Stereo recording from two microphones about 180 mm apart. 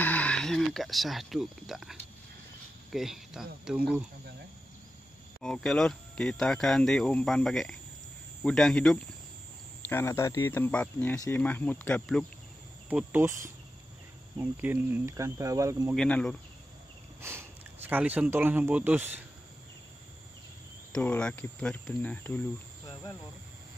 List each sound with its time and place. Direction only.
0.0 s speech: 10° left (ahead or behind)
5.4 s speech: 5° left (ahead or behind)
12.9 s speech: 15° right (ahead or behind)
14.4 s speech: 10° right (ahead or behind)
15.9 s speech: 5° left (ahead or behind)
17.2 s speech: 15° right (ahead or behind)
20.9 s speech: 5° left (ahead or behind)